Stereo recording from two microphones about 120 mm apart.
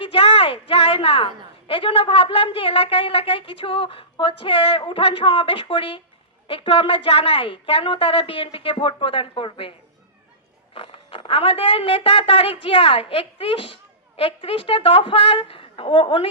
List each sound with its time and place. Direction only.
0.0 s a sound: 50° left (ahead or behind)
1.6 s a woman's voice: 50° left (ahead or behind)
10.8 s a woman's voice: 50° left (ahead or behind)